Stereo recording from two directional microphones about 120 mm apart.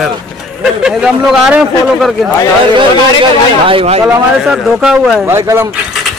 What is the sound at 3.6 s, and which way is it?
Speech, 55° right (ahead or behind).